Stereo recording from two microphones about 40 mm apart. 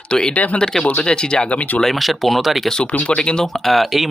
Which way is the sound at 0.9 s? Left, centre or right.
Left.